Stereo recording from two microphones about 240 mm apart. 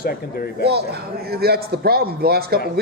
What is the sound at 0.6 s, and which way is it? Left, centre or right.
A man's voice, right.